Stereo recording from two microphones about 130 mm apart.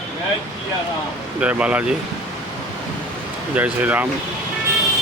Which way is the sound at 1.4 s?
10° right (ahead or behind).